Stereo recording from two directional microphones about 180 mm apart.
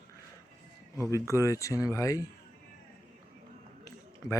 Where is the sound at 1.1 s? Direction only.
15° left (ahead or behind).